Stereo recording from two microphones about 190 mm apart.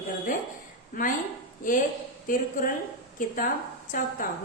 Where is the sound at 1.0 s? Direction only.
45° left (ahead or behind).